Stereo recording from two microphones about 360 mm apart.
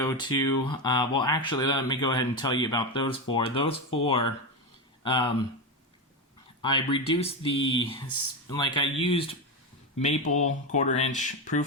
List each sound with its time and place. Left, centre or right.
0.0 s speech: centre
5.0 s speech: centre
6.6 s speech: centre